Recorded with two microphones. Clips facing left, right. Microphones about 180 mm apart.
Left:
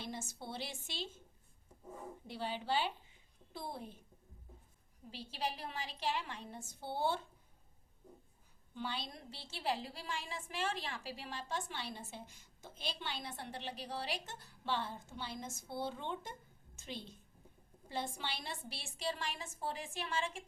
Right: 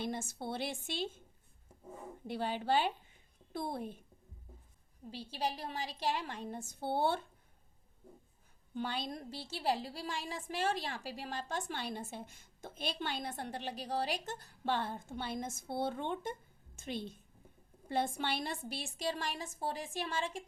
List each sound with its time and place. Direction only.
0.0 s a woman's voice: 55° right (ahead or behind)
2.2 s a woman's voice: 55° right (ahead or behind)
5.3 s a woman's voice: 35° right (ahead or behind); by 7.2 s 55° right (ahead or behind)
8.7 s a woman's voice: 50° right (ahead or behind); by 20.3 s 35° right (ahead or behind)